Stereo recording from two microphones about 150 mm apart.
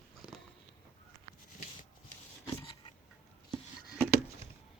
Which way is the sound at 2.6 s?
35° left (ahead or behind).